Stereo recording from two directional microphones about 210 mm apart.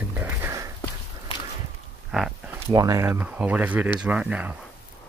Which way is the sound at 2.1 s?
5° right (ahead or behind).